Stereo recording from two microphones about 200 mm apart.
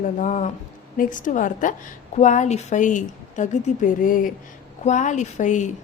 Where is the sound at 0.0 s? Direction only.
40° left (ahead or behind).